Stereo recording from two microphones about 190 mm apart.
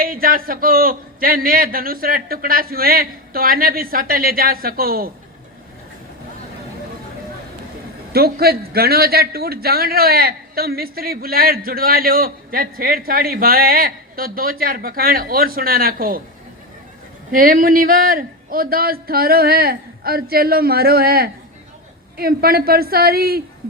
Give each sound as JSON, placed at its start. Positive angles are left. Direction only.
{"t": 0.0, "sound": "a man's voice", "side_deg": -50}
{"t": 8.1, "sound": "a man's voice", "side_deg": -55}
{"t": 17.3, "sound": "a man's voice", "side_deg": -45}